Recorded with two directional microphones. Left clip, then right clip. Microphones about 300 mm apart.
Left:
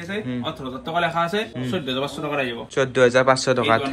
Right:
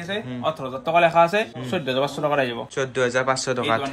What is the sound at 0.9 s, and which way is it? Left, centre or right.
Speech, centre.